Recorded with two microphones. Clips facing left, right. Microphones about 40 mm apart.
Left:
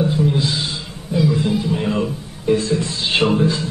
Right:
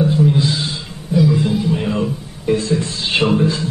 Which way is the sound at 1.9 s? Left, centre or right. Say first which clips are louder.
Right 1 dB; centre.